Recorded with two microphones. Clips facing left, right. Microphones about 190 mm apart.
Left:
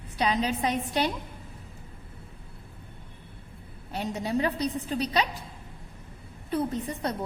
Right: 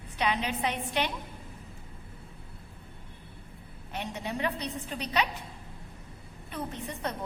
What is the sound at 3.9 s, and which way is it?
A woman's voice, 35° left (ahead or behind).